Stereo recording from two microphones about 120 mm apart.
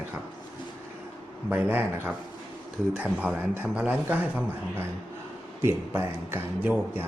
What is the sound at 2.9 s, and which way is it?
Speech, 15° right (ahead or behind).